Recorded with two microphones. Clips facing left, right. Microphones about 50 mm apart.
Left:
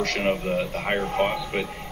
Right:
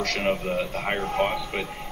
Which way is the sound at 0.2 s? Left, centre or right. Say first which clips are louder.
Even; centre.